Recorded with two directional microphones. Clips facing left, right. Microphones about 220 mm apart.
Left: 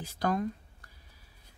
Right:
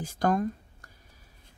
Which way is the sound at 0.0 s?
50° right (ahead or behind).